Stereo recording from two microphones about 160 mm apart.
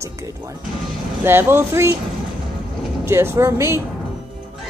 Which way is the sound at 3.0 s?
15° right (ahead or behind).